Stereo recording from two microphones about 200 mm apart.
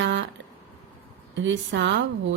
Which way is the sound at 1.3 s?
65° right (ahead or behind).